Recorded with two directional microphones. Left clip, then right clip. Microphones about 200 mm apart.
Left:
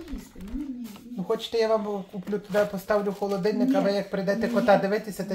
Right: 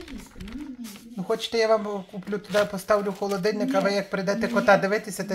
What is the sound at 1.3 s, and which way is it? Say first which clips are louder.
Speech: right 2 dB; 15° right (ahead or behind).